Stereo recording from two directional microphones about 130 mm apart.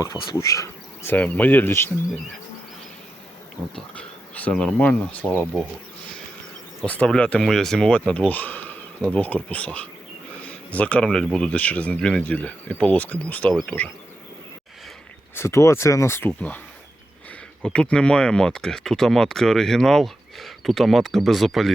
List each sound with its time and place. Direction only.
0.3 s speech: 25° left (ahead or behind)
1.1 s speech: 10° left (ahead or behind)
3.6 s speech: 5° left (ahead or behind)
6.8 s speech: 10° left (ahead or behind)
15.4 s speech: 20° left (ahead or behind)
17.6 s speech: 5° left (ahead or behind)